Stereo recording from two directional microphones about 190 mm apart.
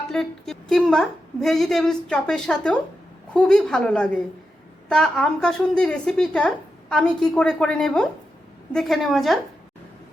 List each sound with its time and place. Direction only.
0.1 s a woman's voice: 5° left (ahead or behind)